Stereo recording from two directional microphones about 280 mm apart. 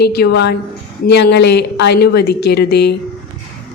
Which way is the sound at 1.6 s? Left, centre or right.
Left.